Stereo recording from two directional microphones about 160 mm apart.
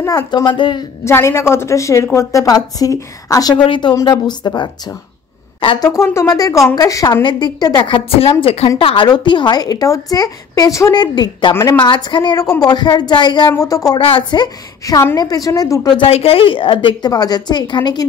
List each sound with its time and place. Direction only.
0.0 s a woman's voice: 20° left (ahead or behind)
1.0 s a woman's voice: 15° left (ahead or behind); by 5.9 s 35° left (ahead or behind)
5.9 s a woman's voice: 20° left (ahead or behind)
11.5 s a woman's voice: 15° left (ahead or behind)
11.8 s a woman's voice: 30° left (ahead or behind)
13.9 s a woman's voice: 35° left (ahead or behind)
16.0 s a woman's voice: 35° left (ahead or behind)